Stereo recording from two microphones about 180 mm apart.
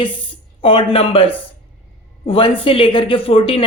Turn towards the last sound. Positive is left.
turn(degrees=30)  # may be behind; listen again after turning